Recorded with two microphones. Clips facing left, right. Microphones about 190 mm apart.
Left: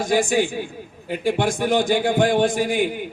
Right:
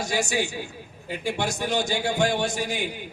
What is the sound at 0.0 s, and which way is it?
A man's voice, 50° left (ahead or behind).